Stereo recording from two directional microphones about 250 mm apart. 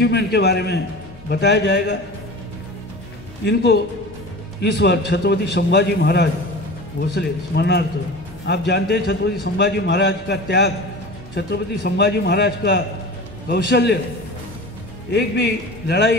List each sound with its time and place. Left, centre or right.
0.0 s a man's voice: left
3.4 s a man's voice: left
15.0 s a man's voice: left